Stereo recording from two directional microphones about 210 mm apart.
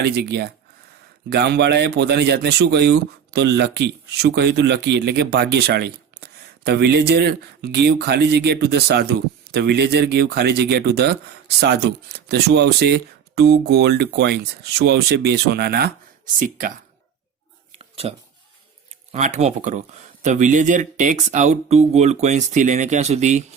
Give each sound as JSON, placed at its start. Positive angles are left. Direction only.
{"t": 0.0, "sound": "speech", "side_deg": -50}
{"t": 17.7, "sound": "a sound", "side_deg": -30}
{"t": 19.1, "sound": "speech", "side_deg": -35}